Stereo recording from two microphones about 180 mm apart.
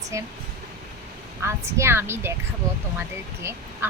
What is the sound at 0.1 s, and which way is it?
Speech, 15° right (ahead or behind).